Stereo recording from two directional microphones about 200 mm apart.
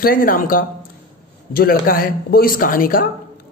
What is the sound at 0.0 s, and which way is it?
A man's voice, 45° left (ahead or behind).